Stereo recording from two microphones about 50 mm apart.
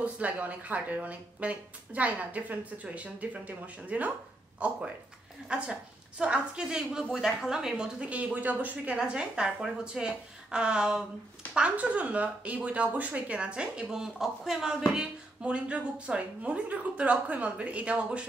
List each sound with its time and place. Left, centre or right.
0.0 s a woman's voice: right; by 8.1 s centre
8.1 s speech: right
8.9 s a woman's voice: centre
15.0 s speech: right